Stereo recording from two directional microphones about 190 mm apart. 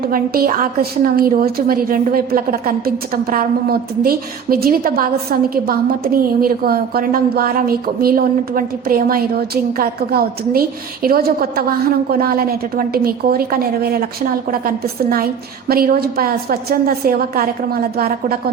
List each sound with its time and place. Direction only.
0.0 s a woman's voice: 50° right (ahead or behind)
15.7 s a woman's voice: 50° right (ahead or behind)